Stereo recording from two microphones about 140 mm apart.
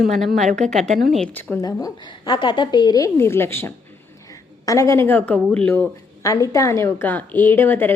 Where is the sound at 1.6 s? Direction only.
30° left (ahead or behind); by 5.9 s 10° left (ahead or behind).